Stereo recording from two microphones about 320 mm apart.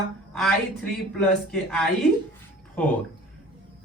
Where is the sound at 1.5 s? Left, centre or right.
Centre.